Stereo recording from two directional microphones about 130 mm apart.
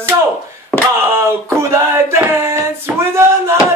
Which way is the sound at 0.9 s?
20° right (ahead or behind).